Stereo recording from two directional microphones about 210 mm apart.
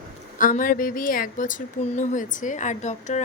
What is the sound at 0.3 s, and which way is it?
A woman's voice, 40° left (ahead or behind).